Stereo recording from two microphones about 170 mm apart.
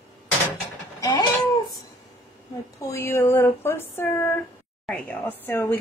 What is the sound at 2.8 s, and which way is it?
Speech, 15° left (ahead or behind).